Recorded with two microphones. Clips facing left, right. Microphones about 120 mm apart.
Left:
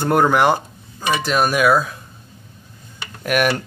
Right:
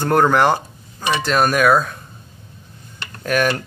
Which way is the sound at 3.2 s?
15° left (ahead or behind).